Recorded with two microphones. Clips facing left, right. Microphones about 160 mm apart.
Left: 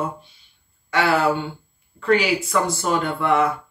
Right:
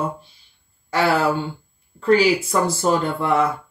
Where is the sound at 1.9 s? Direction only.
35° right (ahead or behind).